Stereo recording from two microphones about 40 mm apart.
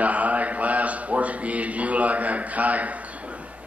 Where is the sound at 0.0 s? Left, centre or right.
Right.